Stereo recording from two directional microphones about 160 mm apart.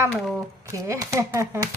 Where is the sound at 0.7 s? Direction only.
20° right (ahead or behind).